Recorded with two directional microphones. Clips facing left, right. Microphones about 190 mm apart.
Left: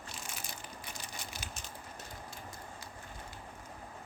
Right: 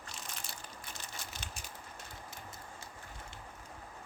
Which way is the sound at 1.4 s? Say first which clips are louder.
Left 2 dB; 5° left (ahead or behind).